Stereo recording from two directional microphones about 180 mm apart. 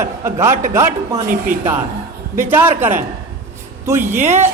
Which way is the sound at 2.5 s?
10° right (ahead or behind).